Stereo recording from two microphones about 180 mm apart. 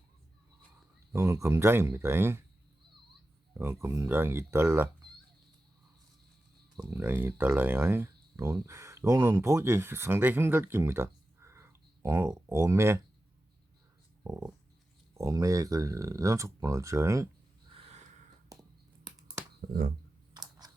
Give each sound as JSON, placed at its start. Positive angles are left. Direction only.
{"t": 1.1, "sound": "speech", "side_deg": -15}
{"t": 3.5, "sound": "speech", "side_deg": -15}
{"t": 6.7, "sound": "speech", "side_deg": -15}
{"t": 14.3, "sound": "speech", "side_deg": -15}
{"t": 17.7, "sound": "a sound", "side_deg": -35}
{"t": 18.5, "sound": "a sound", "side_deg": -20}
{"t": 19.6, "sound": "speech", "side_deg": -55}
{"t": 20.3, "sound": "clicking", "side_deg": -20}